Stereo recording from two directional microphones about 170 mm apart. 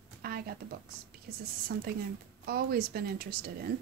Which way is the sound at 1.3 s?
60° right (ahead or behind).